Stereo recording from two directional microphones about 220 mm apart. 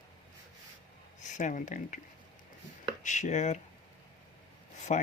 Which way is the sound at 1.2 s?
35° left (ahead or behind).